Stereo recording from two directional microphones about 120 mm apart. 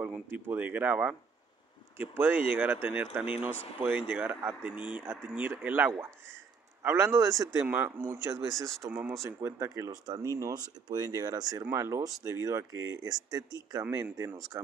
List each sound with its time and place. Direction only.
0.0 s speech: 15° right (ahead or behind)